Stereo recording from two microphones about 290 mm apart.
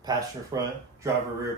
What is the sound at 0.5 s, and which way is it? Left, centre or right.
Speech, centre.